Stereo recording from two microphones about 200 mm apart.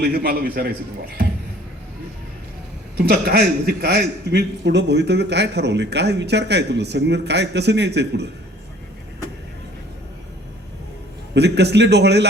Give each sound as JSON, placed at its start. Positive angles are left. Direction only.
{"t": 0.0, "sound": "a man's voice", "side_deg": -50}
{"t": 3.1, "sound": "a man's voice", "side_deg": -50}
{"t": 11.3, "sound": "a man's voice", "side_deg": -55}